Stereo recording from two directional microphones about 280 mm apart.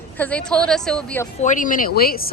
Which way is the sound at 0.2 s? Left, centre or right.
Centre.